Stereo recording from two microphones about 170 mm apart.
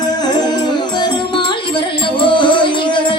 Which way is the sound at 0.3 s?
25° left (ahead or behind).